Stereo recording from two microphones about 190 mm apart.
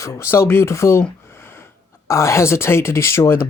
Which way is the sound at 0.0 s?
15° left (ahead or behind).